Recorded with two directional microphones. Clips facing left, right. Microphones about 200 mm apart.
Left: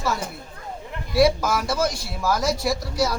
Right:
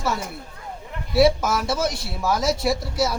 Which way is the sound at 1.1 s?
5° right (ahead or behind).